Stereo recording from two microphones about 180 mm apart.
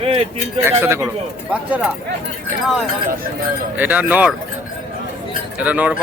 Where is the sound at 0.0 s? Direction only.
30° right (ahead or behind).